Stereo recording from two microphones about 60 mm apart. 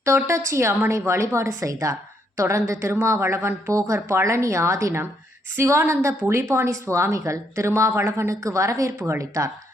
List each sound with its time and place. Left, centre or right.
0.0 s a woman's voice: right
3.7 s a woman's voice: right
9.0 s a woman's voice: right